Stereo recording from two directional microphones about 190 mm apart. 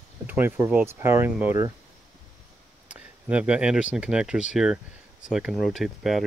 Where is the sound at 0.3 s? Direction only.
10° right (ahead or behind).